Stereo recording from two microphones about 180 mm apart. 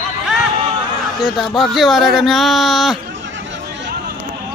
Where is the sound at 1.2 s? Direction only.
Centre (ahead or behind).